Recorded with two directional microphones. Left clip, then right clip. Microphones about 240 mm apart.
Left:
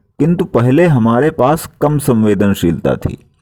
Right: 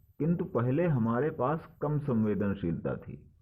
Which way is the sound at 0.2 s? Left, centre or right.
Left.